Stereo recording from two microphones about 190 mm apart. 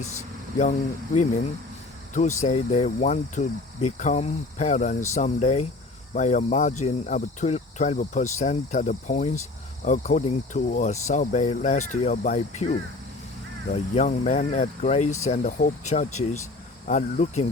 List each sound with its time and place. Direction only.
0.0 s speech: 40° left (ahead or behind)
13.7 s speech: 35° left (ahead or behind)